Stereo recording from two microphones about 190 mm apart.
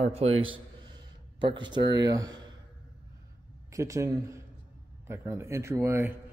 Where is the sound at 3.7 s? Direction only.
15° right (ahead or behind).